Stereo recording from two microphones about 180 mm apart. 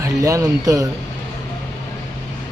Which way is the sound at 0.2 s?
20° right (ahead or behind).